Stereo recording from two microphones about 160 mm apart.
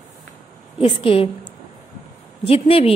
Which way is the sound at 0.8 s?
35° left (ahead or behind).